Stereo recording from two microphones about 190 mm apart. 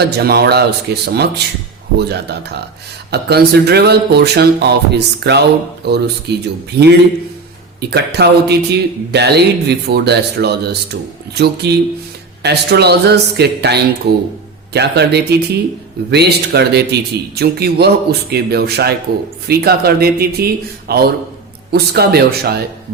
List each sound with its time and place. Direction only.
0.0 s speech: 55° right (ahead or behind)